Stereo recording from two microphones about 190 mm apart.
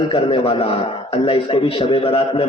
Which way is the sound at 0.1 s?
25° left (ahead or behind).